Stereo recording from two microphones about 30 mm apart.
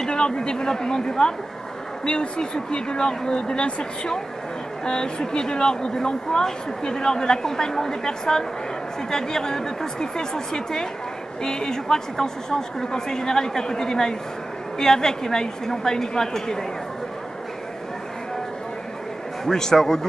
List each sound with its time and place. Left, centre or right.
0.1 s speech: left
4.8 s speech: left
19.4 s a man's voice: centre